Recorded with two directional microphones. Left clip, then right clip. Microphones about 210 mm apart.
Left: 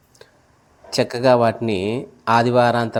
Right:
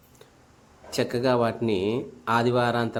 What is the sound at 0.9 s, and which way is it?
Speech, 25° left (ahead or behind).